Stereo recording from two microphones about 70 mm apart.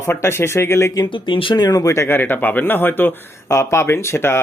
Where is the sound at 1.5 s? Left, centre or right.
Left.